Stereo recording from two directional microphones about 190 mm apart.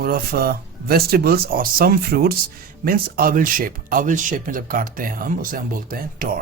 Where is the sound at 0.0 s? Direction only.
50° right (ahead or behind).